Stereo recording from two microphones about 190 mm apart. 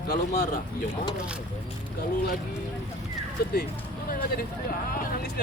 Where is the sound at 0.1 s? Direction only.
55° left (ahead or behind).